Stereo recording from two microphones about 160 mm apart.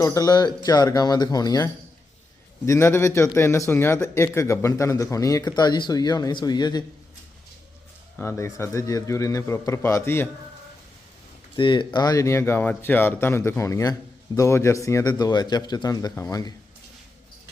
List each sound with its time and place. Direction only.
0.0 s a man's voice: 20° left (ahead or behind)
8.1 s a man's voice: 15° left (ahead or behind)
11.5 s a man's voice: 30° left (ahead or behind)